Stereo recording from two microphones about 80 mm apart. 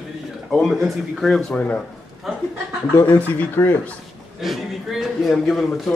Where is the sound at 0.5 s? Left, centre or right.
Centre.